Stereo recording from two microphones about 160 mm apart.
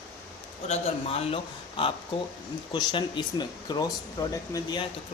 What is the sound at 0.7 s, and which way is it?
Speech, 40° left (ahead or behind).